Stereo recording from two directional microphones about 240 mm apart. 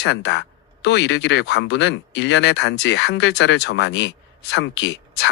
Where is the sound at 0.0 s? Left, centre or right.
Left.